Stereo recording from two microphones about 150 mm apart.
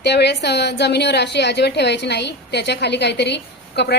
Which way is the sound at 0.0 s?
90° left.